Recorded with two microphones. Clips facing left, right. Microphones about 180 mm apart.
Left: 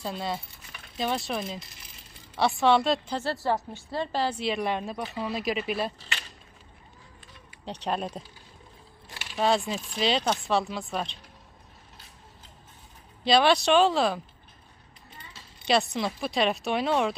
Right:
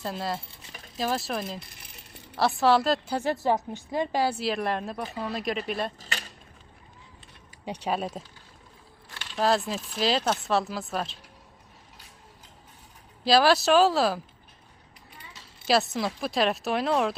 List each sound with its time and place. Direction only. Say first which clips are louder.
0.0 s speech: right 1 dB; centre (ahead or behind)
3.2 s speech: right 3 dB; 15° right (ahead or behind); by 5.9 s 5° left (ahead or behind)
6.0 s a sound: right 2 dB; 40° right (ahead or behind)
7.6 s speech: right 1 dB; 10° right (ahead or behind)
9.0 s speech: even; 10° left (ahead or behind)
13.2 s speech: right 1 dB; 5° right (ahead or behind)
15.6 s speech: right 1 dB; 5° right (ahead or behind)